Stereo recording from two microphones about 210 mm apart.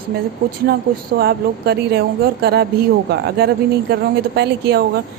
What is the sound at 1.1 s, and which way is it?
A woman's voice, 50° right (ahead or behind).